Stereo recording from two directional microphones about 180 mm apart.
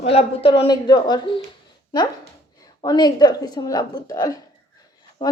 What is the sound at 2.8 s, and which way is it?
Speech, 20° left (ahead or behind).